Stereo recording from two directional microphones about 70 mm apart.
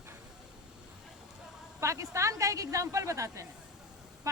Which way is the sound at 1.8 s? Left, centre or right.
Right.